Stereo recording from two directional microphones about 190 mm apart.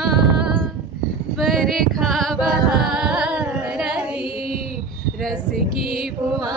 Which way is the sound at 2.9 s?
5° right (ahead or behind).